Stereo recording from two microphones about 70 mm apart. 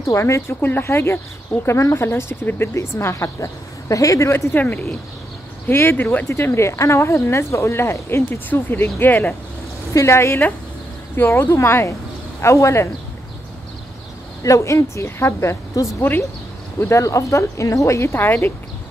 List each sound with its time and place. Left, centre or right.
0.0 s speech: left
0.6 s speech: left
3.9 s speech: left
4.3 s speech: left
5.7 s speech: left
14.4 s speech: left
16.0 s speech: left
16.9 s speech: left